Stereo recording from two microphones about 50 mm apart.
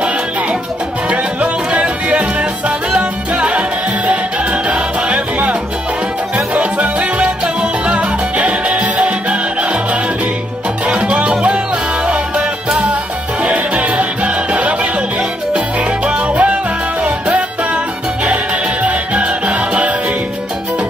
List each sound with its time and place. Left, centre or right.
1.1 s music: right
10.9 s salsa music: right
12.1 s music: right
16.1 s salsa music: right
18.2 s music: right